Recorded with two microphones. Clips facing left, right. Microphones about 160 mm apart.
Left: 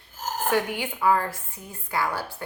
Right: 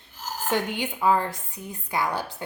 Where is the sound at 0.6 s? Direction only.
20° right (ahead or behind).